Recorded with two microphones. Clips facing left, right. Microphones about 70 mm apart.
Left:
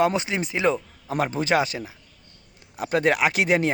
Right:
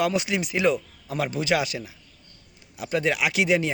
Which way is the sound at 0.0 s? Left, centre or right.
Left.